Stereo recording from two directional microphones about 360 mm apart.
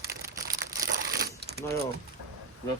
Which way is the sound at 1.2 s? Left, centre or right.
Right.